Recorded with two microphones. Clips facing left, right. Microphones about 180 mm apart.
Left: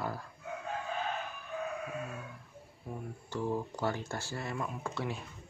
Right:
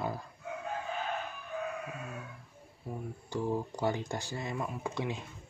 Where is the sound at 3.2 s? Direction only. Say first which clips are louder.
Right 1 dB; 15° right (ahead or behind).